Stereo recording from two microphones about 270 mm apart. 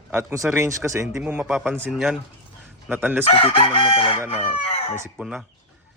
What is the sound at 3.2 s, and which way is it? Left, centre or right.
Chicken, left.